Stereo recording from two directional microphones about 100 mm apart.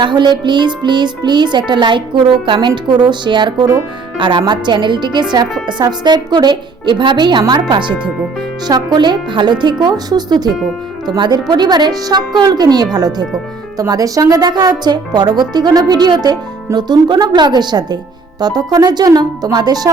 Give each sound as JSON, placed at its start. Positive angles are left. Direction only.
{"t": 0.0, "sound": "music", "side_deg": -50}
{"t": 13.7, "sound": "speech", "side_deg": -35}
{"t": 14.8, "sound": "music", "side_deg": -45}
{"t": 18.3, "sound": "speech", "side_deg": -40}